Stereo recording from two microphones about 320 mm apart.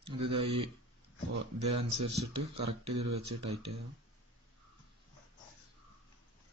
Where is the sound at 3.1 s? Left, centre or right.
Right.